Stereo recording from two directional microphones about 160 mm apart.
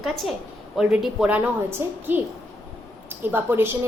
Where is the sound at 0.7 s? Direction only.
5° right (ahead or behind).